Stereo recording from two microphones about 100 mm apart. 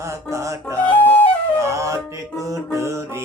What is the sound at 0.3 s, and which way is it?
Music, 30° right (ahead or behind).